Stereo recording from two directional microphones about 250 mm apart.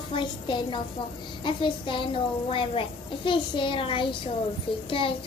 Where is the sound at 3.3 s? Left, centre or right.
Centre.